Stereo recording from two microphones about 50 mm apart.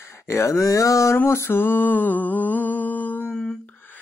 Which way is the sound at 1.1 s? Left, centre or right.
Left.